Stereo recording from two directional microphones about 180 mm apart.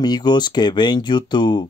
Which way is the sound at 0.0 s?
25° left (ahead or behind).